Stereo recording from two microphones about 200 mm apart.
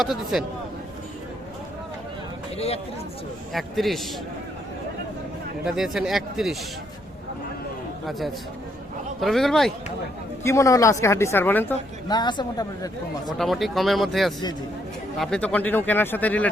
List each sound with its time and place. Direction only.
0.0 s speech: centre (ahead or behind)
2.6 s speech: 30° left (ahead or behind)
3.5 s speech: centre (ahead or behind)
5.6 s speech: centre (ahead or behind)
9.2 s speech: centre (ahead or behind)
10.4 s a woman's voice: 15° left (ahead or behind)
12.0 s speech: 20° left (ahead or behind)
13.4 s a woman's voice: centre (ahead or behind)